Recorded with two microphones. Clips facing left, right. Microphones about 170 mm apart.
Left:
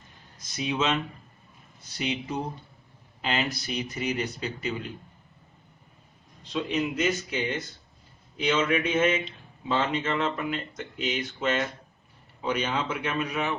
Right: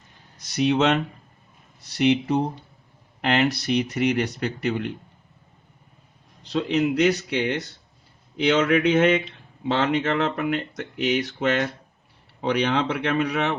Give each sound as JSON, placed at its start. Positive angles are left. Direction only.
{"t": 0.3, "sound": "speech", "side_deg": -75}
{"t": 6.4, "sound": "speech", "side_deg": -70}